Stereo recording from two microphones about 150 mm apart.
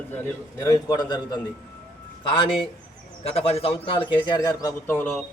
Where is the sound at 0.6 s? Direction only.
25° left (ahead or behind).